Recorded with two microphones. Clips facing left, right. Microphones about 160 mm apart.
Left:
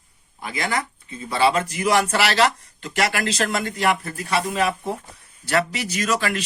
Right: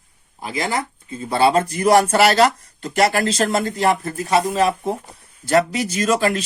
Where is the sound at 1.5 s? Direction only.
45° right (ahead or behind).